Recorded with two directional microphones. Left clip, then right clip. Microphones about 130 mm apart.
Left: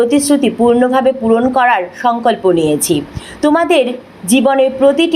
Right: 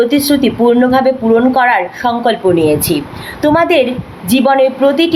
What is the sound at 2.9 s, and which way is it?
Speech, 15° right (ahead or behind).